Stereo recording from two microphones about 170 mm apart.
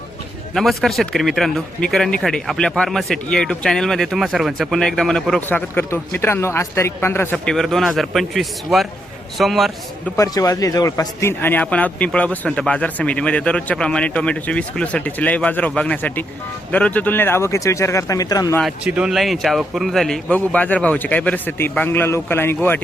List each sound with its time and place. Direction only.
0.5 s speech: centre (ahead or behind)
10.2 s a man's voice: 20° left (ahead or behind)
18.6 s a man's voice: 5° right (ahead or behind); by 22.8 s 15° left (ahead or behind)